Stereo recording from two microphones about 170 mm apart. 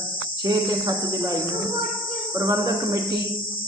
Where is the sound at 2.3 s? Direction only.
20° right (ahead or behind).